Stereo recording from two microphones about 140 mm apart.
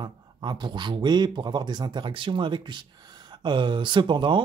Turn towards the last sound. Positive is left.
turn(degrees=-35)  # may be behind; listen again after turning